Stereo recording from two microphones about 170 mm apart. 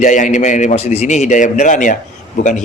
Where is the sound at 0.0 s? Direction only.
45° left (ahead or behind).